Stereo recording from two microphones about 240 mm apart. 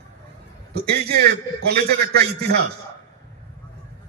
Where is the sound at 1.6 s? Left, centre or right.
Right.